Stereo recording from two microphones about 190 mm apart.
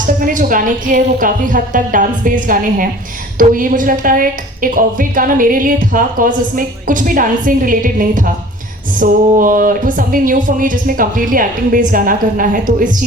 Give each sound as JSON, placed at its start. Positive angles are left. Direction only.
{"t": 0.3, "sound": "a woman's voice", "side_deg": -45}